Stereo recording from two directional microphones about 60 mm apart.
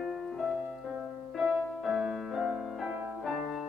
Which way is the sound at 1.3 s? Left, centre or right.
Centre.